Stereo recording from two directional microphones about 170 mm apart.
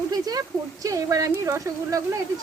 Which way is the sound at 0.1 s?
20° right (ahead or behind).